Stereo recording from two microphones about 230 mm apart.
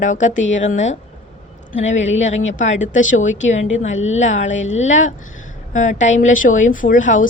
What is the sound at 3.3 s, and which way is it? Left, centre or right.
Speech, left.